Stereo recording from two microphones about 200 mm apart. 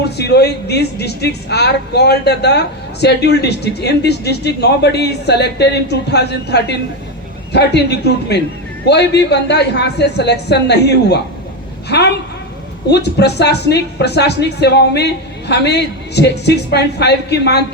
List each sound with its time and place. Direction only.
0.0 s speech: 55° left (ahead or behind)